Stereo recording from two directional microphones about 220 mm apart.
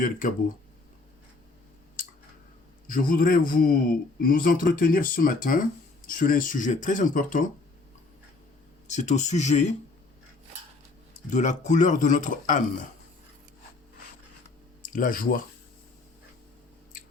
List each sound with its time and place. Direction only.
0.0 s speech: 40° left (ahead or behind)
2.8 s speech: 40° left (ahead or behind)
8.9 s speech: 30° left (ahead or behind)
11.3 s speech: 35° left (ahead or behind)
14.8 s speech: 35° left (ahead or behind)